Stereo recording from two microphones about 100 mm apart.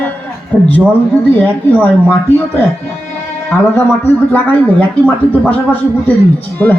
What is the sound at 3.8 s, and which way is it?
Speech, 20° left (ahead or behind).